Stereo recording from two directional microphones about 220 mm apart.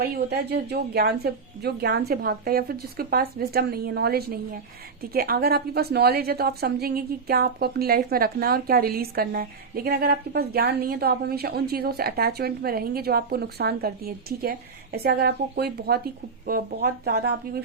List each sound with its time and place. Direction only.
0.0 s a woman's voice: 50° right (ahead or behind)